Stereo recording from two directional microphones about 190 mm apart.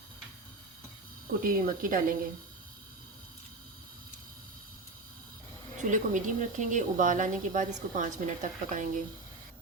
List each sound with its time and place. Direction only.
1.4 s speech: 45° right (ahead or behind)
5.9 s a woman's voice: 40° right (ahead or behind)